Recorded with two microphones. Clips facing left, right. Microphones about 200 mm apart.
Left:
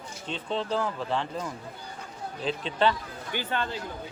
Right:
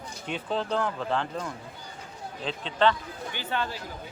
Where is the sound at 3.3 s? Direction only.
50° left (ahead or behind).